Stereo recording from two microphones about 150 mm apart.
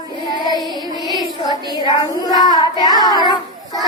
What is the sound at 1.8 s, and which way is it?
Child singing, 25° left (ahead or behind).